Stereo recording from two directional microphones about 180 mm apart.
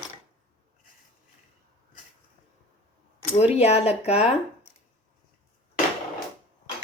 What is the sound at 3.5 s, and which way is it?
Speech, 35° left (ahead or behind).